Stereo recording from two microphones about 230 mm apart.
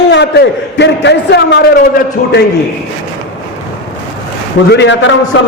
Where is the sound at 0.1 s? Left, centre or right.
Left.